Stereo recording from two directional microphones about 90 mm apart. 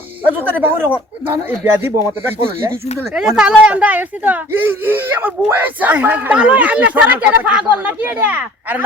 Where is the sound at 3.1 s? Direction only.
5° right (ahead or behind).